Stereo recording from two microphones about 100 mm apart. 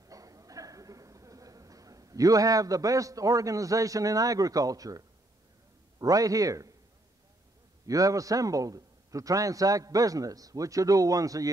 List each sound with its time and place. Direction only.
0.0 s a sound: 35° right (ahead or behind)
5.9 s a man's voice: 35° right (ahead or behind)
7.8 s a man's voice: 35° right (ahead or behind)